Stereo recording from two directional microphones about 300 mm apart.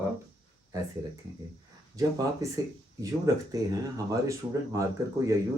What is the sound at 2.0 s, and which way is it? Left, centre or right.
Speech, centre.